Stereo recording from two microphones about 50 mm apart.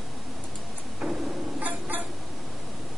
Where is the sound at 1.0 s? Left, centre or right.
Centre.